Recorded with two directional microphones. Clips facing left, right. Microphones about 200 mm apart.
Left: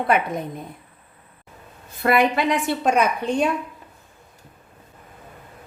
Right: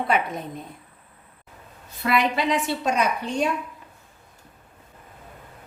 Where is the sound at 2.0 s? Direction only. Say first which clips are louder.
Left 4 dB; 50° left (ahead or behind).